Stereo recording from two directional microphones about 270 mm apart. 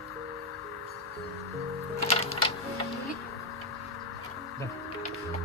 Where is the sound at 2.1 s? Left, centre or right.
Left.